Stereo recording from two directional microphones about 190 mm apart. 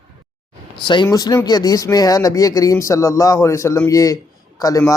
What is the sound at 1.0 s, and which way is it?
Speech, 20° left (ahead or behind).